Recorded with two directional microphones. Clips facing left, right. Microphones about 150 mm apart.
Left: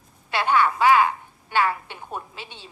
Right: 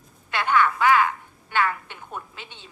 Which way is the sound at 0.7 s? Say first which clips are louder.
Left 2 dB; 15° left (ahead or behind).